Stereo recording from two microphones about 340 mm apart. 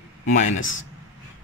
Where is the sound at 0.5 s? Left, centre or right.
Left.